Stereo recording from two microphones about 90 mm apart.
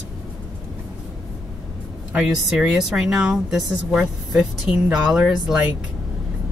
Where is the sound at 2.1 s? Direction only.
5° right (ahead or behind).